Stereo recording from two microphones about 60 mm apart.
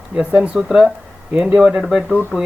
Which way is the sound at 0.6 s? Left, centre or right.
Centre.